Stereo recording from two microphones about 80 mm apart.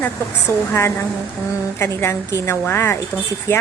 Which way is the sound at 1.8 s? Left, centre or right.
Left.